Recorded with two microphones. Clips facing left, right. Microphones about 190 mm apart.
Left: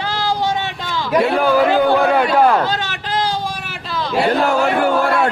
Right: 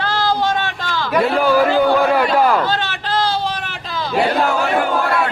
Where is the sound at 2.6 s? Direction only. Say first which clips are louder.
Right 1 dB; 15° left (ahead or behind).